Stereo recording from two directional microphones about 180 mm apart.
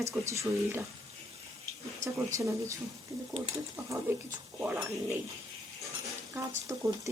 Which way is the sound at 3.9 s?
15° right (ahead or behind).